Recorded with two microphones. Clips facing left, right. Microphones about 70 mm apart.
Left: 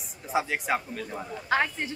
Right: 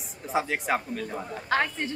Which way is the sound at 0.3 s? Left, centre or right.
Centre.